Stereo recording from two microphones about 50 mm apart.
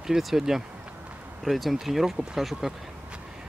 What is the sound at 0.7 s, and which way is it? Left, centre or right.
Run, right.